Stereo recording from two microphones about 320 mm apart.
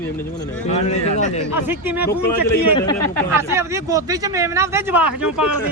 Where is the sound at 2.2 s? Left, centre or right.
Centre.